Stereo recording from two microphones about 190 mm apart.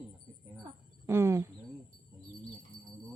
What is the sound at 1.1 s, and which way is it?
Speech, 15° right (ahead or behind).